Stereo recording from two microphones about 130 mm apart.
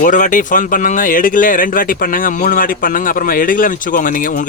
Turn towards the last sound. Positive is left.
turn(degrees=90)